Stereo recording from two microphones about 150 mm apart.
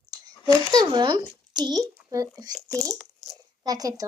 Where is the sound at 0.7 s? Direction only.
25° right (ahead or behind).